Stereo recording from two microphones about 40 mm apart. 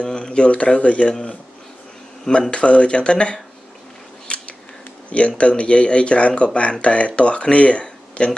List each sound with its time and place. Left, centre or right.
0.0 s speech: left
2.5 s speech: left
4.3 s scissors: left
5.4 s speech: left